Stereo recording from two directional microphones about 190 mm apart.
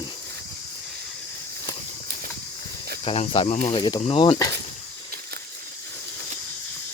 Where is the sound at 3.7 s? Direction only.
25° left (ahead or behind).